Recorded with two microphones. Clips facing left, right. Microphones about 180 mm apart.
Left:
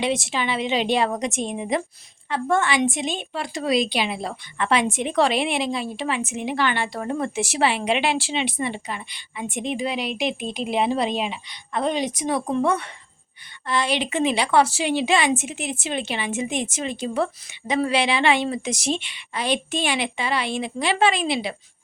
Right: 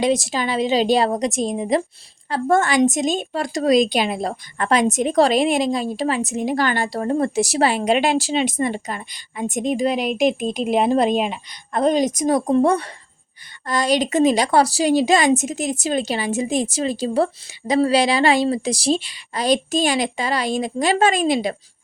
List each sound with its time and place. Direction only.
0.0 s a woman's voice: 40° right (ahead or behind)